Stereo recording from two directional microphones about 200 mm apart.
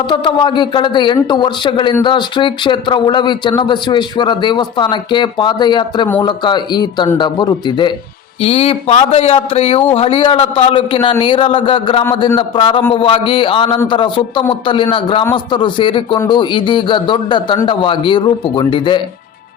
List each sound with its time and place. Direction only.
0.1 s a man's voice: 25° left (ahead or behind)